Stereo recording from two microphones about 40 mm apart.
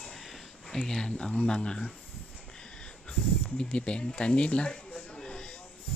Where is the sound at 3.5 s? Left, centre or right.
Left.